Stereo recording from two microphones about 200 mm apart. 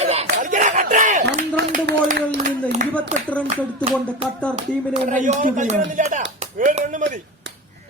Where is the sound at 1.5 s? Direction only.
55° right (ahead or behind).